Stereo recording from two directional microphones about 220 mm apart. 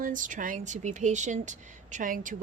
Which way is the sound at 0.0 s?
35° right (ahead or behind).